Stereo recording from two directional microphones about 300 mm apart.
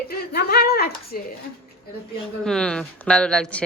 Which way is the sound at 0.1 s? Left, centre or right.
Left.